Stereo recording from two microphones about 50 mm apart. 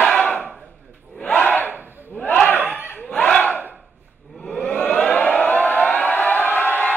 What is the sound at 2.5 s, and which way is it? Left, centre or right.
Chuckle, right.